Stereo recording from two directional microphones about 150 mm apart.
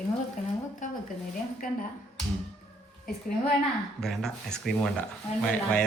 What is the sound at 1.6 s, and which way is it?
Speech, 70° left (ahead or behind).